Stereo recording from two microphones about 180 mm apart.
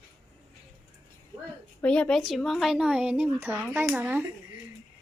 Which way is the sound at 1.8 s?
5° left (ahead or behind).